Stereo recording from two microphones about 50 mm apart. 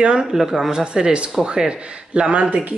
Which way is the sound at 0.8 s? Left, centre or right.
Centre.